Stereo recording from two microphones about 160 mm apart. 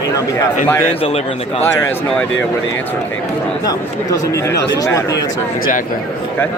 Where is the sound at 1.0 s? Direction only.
35° left (ahead or behind).